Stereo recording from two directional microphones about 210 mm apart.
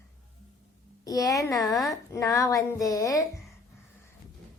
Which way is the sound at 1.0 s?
15° left (ahead or behind).